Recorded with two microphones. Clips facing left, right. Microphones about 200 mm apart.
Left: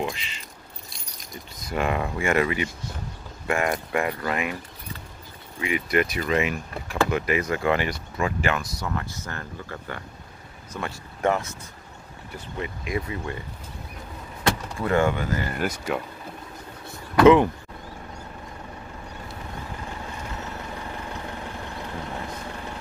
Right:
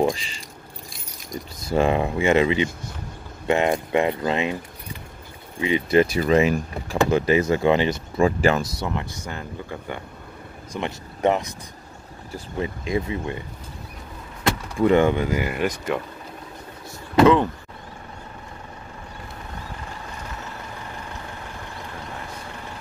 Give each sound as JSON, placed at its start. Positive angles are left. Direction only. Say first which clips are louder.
{"t": 0.0, "sound": "speech", "louder": "right 8 dB", "side_deg": -40}
{"t": 1.7, "sound": "speech", "louder": "right 6 dB", "side_deg": -25}
{"t": 5.6, "sound": "speech", "louder": "right 6 dB", "side_deg": -25}
{"t": 8.8, "sound": "speech", "louder": "right 2 dB", "side_deg": -15}
{"t": 12.5, "sound": "speech", "louder": "right 5 dB", "side_deg": -30}
{"t": 14.9, "sound": "speech", "louder": "right 4 dB", "side_deg": -20}
{"t": 15.5, "sound": "speech", "louder": "right 3 dB", "side_deg": 0}
{"t": 17.2, "sound": "speech", "louder": "left 1 dB", "side_deg": -20}